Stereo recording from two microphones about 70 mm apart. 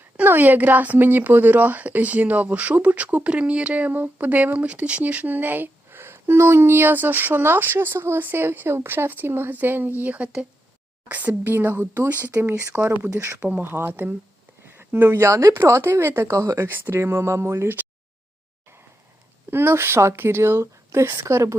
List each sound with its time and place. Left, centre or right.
0.2 s speech: right
11.5 s speech: right
13.1 s speech: right
13.5 s speech: right
16.6 s speech: right
17.0 s speech: right
19.5 s speech: right